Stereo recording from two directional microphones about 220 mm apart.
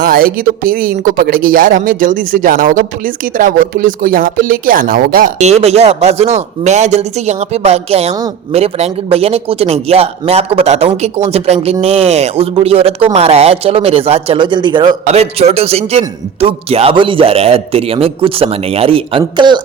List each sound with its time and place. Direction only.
0.0 s a man's voice: 40° right (ahead or behind); by 19.6 s 20° right (ahead or behind)